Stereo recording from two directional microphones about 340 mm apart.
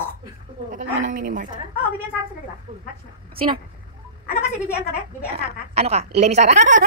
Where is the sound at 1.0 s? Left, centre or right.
Right.